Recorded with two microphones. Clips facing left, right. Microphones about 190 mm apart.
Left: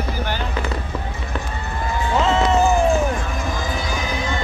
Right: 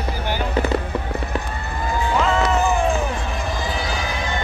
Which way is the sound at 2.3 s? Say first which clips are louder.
Left 4 dB; 25° left (ahead or behind).